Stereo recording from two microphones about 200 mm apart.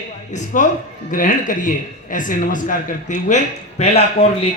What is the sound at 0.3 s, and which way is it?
A man's voice, 35° left (ahead or behind).